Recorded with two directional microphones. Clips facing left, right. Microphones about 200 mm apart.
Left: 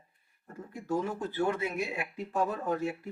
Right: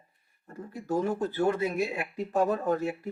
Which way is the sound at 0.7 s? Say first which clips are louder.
Right 4 dB; 40° right (ahead or behind).